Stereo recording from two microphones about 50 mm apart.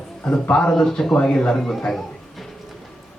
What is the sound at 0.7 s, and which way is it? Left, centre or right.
Speech, centre.